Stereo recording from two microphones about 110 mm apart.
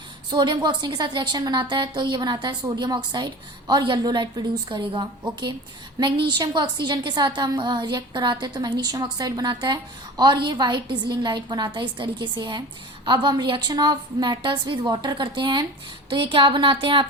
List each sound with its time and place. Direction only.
0.3 s a woman's voice: 45° right (ahead or behind)